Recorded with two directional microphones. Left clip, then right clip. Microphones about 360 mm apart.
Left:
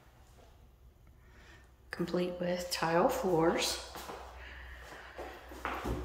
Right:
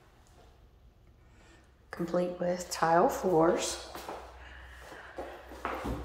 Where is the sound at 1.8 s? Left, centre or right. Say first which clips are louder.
Right 3 dB; centre.